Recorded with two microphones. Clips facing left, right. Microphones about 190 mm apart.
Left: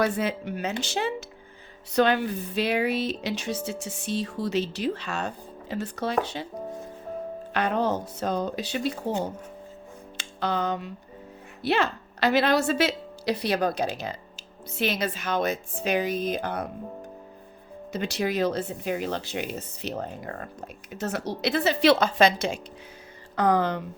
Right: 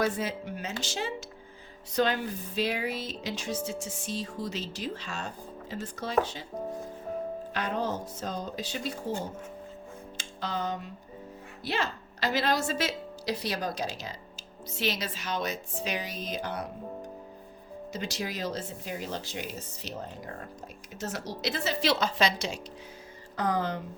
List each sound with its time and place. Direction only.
0.0 s speech: 65° left (ahead or behind)
7.5 s speech: 65° left (ahead or behind)
10.2 s music: 65° left (ahead or behind)
11.6 s a woman's voice: 65° left (ahead or behind)
17.9 s speech: 60° left (ahead or behind)
23.3 s speech: 65° left (ahead or behind)